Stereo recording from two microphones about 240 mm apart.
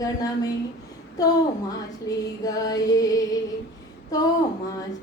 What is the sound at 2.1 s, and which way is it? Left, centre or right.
A woman's voice, centre.